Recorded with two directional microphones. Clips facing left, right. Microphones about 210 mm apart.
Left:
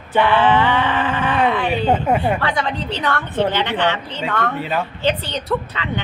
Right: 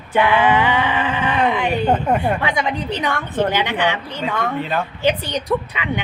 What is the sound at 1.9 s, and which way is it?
Speech, 10° left (ahead or behind).